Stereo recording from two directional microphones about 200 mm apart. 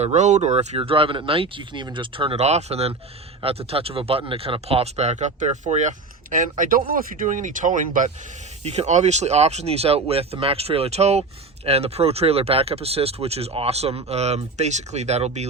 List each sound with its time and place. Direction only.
0.0 s speech: 35° right (ahead or behind)